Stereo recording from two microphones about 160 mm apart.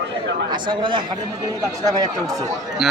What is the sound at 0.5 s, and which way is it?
Speech, 30° right (ahead or behind).